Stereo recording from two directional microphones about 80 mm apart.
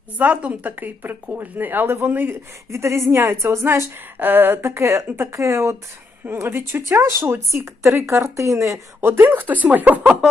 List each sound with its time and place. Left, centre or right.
0.2 s speech: centre
2.6 s speech: right; by 10.2 s centre